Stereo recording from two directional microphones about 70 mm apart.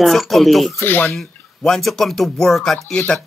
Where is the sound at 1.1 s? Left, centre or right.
Centre.